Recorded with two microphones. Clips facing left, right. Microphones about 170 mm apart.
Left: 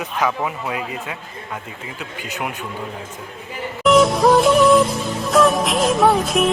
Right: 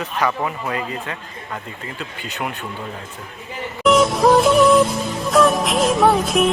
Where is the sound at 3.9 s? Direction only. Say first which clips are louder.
Left 1 dB; centre (ahead or behind).